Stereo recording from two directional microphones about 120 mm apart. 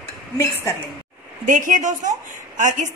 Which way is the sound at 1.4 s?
90° right.